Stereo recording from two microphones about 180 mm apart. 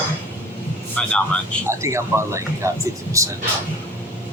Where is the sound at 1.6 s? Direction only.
15° right (ahead or behind).